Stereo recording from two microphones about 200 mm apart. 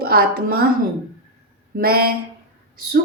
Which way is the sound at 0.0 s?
50° right (ahead or behind).